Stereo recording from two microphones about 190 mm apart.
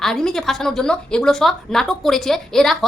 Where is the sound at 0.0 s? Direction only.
Centre (ahead or behind).